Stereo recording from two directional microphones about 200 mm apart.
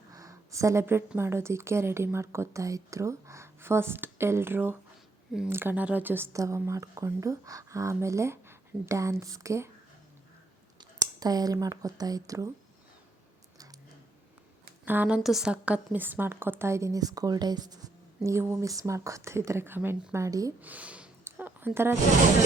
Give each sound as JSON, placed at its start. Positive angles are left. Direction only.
{"t": 0.1, "sound": "a woman's voice", "side_deg": -15}
{"t": 10.8, "sound": "speech", "side_deg": -20}
{"t": 14.8, "sound": "a woman's voice", "side_deg": -10}